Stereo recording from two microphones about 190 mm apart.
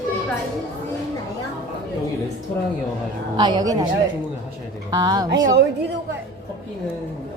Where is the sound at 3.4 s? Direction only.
20° right (ahead or behind).